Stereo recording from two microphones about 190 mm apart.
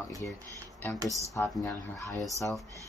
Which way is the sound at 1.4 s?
15° left (ahead or behind).